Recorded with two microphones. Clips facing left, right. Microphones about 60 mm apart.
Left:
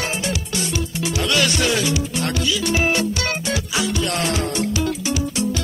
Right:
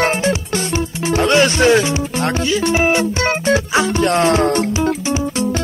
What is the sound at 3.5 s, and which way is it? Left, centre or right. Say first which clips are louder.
Music: right 10 dB; right.